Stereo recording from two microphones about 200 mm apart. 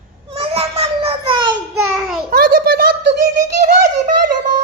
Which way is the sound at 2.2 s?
50° right (ahead or behind).